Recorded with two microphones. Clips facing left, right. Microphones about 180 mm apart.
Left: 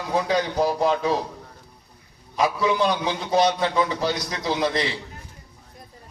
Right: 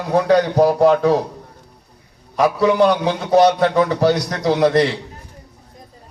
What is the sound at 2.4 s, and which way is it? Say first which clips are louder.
A man's voice: right 7 dB; 65° right (ahead or behind).